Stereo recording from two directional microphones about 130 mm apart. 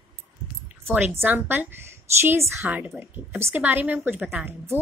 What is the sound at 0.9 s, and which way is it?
A woman's voice, 15° right (ahead or behind).